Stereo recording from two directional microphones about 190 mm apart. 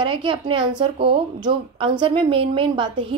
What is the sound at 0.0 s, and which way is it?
A woman's voice, 25° right (ahead or behind).